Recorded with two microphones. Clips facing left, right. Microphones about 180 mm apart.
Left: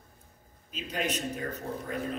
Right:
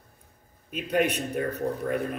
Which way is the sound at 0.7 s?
60° right (ahead or behind).